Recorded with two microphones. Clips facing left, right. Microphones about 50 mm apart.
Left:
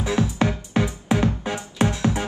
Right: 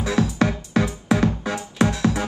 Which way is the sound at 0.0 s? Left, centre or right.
Left.